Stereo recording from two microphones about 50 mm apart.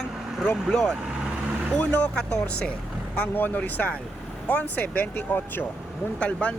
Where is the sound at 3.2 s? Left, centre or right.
Left.